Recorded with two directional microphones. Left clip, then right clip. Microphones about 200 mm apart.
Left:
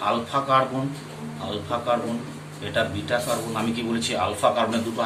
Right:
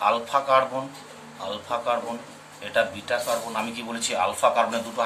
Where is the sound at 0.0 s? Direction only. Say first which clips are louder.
Right 2 dB; 35° right (ahead or behind).